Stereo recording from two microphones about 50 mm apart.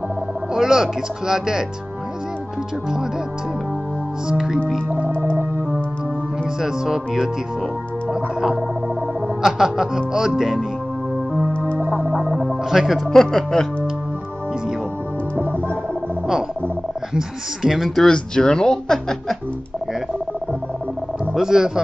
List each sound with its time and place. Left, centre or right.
0.6 s speech: centre
4.3 s speech: centre
6.6 s speech: centre
8.1 s music: centre
9.4 s speech: centre
11.8 s music: right
12.6 s speech: centre
13.0 s speech: centre
17.1 s speech: centre
18.0 s speech: centre
21.4 s speech: centre